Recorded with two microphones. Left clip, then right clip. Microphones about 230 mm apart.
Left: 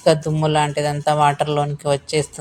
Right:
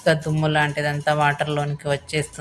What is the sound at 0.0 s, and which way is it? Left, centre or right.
A woman's voice, centre.